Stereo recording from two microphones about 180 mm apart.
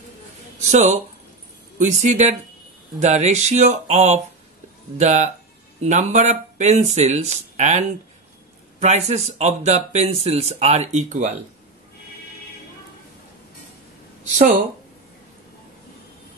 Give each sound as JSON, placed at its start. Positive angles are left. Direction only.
{"t": 0.7, "sound": "speech", "side_deg": -40}